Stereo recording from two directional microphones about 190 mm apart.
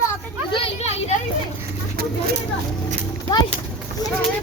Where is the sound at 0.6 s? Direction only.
35° left (ahead or behind).